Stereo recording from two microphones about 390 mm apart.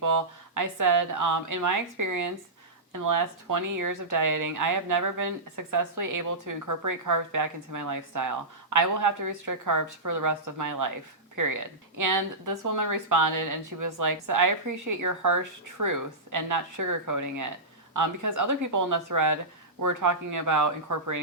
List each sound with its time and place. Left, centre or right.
0.0 s speech: right